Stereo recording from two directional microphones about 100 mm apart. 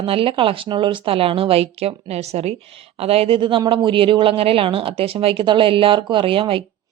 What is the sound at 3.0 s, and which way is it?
A woman's voice, 80° right.